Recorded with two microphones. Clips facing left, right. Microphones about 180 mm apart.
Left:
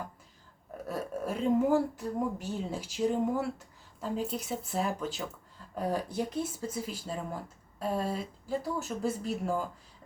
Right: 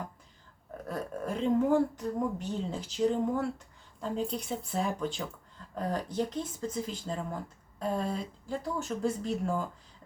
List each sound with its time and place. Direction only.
0.9 s a woman's voice: 5° left (ahead or behind)